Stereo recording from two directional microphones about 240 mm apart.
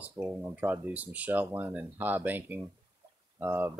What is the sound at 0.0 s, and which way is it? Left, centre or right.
Speech, centre.